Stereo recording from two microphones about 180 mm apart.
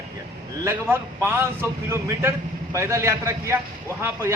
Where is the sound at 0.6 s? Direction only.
15° right (ahead or behind).